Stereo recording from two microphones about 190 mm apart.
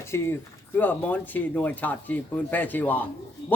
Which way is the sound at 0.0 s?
15° left (ahead or behind).